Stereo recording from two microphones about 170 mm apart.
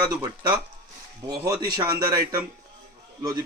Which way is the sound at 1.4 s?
25° right (ahead or behind).